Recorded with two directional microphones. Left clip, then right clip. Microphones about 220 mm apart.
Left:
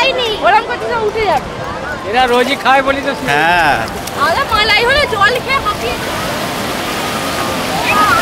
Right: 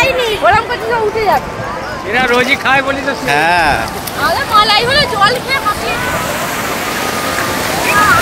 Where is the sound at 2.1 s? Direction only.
15° left (ahead or behind).